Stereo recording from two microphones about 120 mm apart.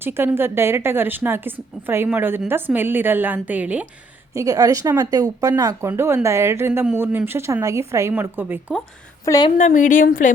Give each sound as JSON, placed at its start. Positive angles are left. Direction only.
{"t": 0.0, "sound": "a woman's voice", "side_deg": -20}
{"t": 4.4, "sound": "a woman's voice", "side_deg": -30}
{"t": 9.2, "sound": "a woman's voice", "side_deg": 30}
{"t": 9.6, "sound": "a woman's voice", "side_deg": 90}